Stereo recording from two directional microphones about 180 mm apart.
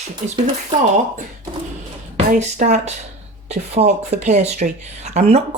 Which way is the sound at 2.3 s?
45° right (ahead or behind).